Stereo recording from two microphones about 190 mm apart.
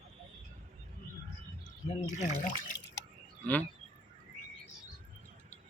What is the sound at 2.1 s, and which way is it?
Speech, 45° left (ahead or behind).